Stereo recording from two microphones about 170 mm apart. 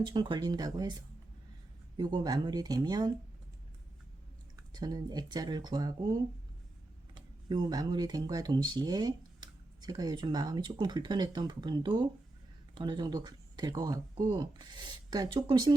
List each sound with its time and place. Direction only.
0.1 s speech: 30° right (ahead or behind)
4.5 s speech: 25° right (ahead or behind)